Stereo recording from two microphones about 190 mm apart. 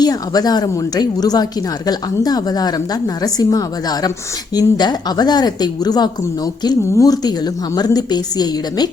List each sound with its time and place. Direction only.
0.0 s speech: 20° left (ahead or behind)